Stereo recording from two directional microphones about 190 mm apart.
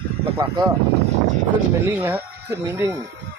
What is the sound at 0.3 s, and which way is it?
Speech, 25° right (ahead or behind).